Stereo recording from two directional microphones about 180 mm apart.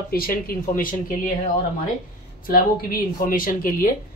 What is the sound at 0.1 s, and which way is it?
Speech, 55° left (ahead or behind).